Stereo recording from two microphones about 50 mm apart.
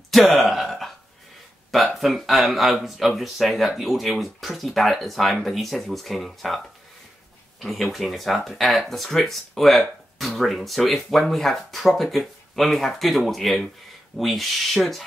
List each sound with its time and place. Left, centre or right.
0.1 s a sound: centre
2.0 s speech: centre
7.6 s speech: centre